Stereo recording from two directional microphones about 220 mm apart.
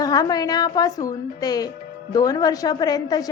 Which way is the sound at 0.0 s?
15° left (ahead or behind).